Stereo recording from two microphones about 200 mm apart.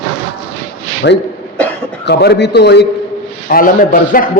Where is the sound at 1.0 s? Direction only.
60° left (ahead or behind).